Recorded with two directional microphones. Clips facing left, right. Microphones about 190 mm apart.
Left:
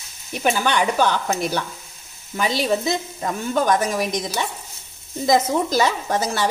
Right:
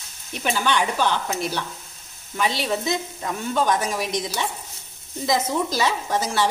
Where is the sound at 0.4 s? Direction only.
45° left (ahead or behind).